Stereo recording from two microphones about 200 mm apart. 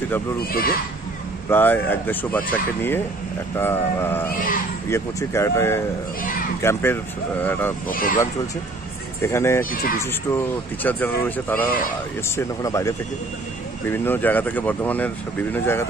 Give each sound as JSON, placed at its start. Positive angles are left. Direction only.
{"t": 0.5, "sound": "speech", "side_deg": 45}
{"t": 1.5, "sound": "speech", "side_deg": 10}
{"t": 7.9, "sound": "speech", "side_deg": 45}
{"t": 9.2, "sound": "speech", "side_deg": 15}